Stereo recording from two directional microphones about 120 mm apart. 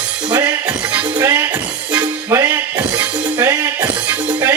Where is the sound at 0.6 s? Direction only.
15° right (ahead or behind).